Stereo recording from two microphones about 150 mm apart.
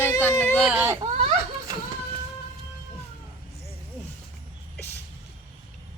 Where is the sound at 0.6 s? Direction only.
10° right (ahead or behind).